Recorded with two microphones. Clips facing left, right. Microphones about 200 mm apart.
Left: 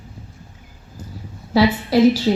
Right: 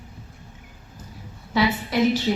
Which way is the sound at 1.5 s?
35° left (ahead or behind).